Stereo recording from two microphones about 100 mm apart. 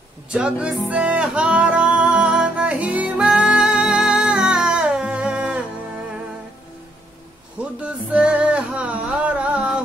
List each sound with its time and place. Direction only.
0.3 s music: 10° right (ahead or behind)
7.8 s music: 10° right (ahead or behind)